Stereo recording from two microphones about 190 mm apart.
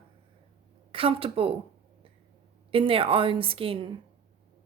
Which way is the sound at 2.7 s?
30° right (ahead or behind).